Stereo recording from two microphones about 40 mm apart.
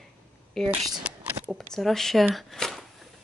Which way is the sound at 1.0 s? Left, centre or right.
Right.